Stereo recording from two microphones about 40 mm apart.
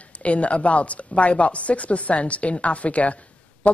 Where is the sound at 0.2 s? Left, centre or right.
Left.